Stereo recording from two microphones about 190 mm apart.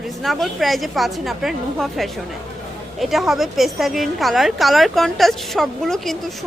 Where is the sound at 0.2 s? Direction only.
Centre (ahead or behind).